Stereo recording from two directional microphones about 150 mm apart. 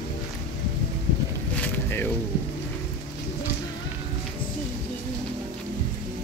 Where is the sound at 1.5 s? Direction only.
10° left (ahead or behind).